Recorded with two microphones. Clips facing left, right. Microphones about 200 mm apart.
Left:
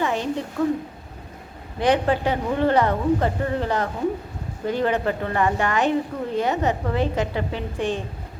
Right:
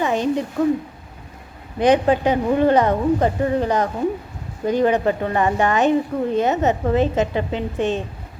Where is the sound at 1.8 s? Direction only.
20° right (ahead or behind).